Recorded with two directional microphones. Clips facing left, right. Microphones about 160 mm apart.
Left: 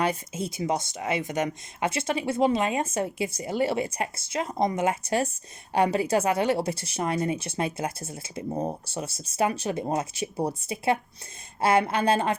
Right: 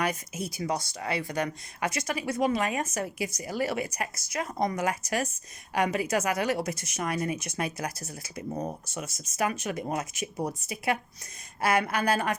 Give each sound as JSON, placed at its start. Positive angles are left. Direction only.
{"t": 0.0, "sound": "speech", "side_deg": 25}